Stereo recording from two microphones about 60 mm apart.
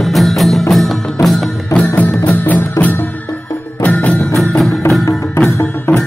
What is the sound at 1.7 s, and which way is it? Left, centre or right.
Music, left.